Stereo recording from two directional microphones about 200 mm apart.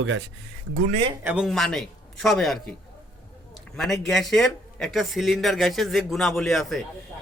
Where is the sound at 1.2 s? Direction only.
5° right (ahead or behind).